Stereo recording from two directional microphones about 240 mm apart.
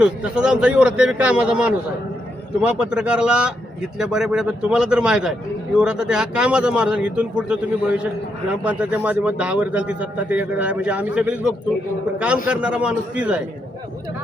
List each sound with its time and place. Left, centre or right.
0.0 s a man's voice: centre